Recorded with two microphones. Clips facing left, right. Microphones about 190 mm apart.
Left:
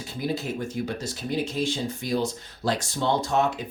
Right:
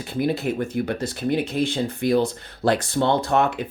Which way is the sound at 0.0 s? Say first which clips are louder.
Right 6 dB; 60° right (ahead or behind).